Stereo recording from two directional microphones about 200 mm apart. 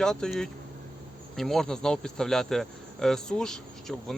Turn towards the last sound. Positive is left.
turn(degrees=0)  # may be behind; listen again after turning